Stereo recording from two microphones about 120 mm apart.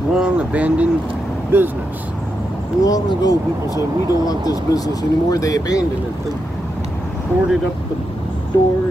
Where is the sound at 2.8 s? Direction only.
30° left (ahead or behind).